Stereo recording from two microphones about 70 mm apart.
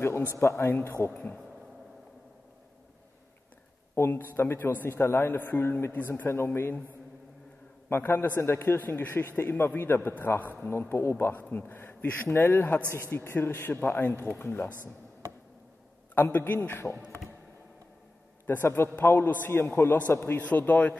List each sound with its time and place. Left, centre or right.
0.4 s a man's voice: left
3.9 s a man's voice: left
7.9 s a man's voice: left
16.2 s a man's voice: left
18.5 s a man's voice: left